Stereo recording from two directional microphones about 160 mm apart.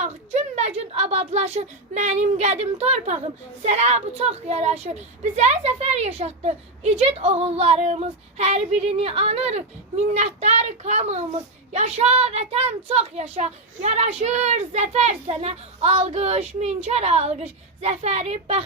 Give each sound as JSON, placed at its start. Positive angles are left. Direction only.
{"t": 0.0, "sound": "a child's voice", "side_deg": -45}